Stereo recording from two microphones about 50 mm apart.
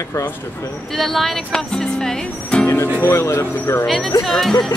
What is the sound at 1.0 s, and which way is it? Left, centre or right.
Speech, centre.